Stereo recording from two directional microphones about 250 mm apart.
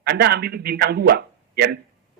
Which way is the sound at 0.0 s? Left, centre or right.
Right.